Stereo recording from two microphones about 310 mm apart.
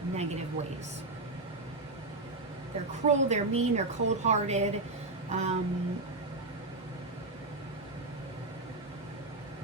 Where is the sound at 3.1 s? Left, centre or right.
Right.